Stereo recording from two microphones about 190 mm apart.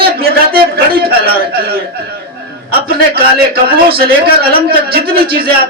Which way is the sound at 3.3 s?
55° right (ahead or behind).